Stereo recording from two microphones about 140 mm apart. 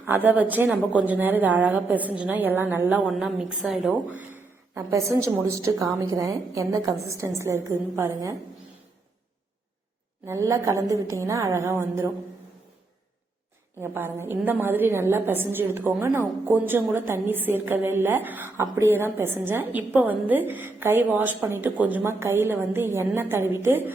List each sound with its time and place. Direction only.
0.0 s a woman's voice: 15° right (ahead or behind)
3.1 s a woman's voice: 5° right (ahead or behind)
4.7 s a woman's voice: 20° right (ahead or behind)
10.2 s a woman's voice: 20° right (ahead or behind)
13.8 s a woman's voice: 15° right (ahead or behind)